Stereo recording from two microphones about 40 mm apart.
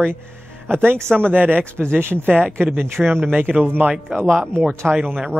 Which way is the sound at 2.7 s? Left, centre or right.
Right.